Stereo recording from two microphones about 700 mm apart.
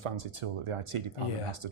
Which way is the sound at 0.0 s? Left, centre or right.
Right.